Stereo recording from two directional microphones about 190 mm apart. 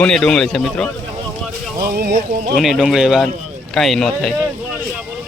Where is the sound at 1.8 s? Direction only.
55° right (ahead or behind).